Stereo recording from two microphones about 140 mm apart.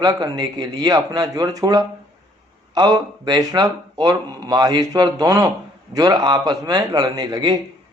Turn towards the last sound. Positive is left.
turn(degrees=-30)  # may be behind; listen again after turning